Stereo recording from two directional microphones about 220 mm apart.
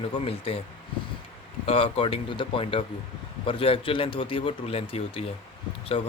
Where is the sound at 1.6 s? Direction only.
25° left (ahead or behind).